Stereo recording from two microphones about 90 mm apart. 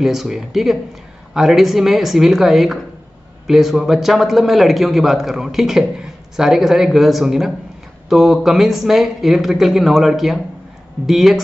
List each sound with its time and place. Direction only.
0.0 s speech: 5° right (ahead or behind)